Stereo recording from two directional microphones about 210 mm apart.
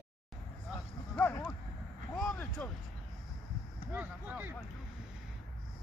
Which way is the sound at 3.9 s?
10° right (ahead or behind).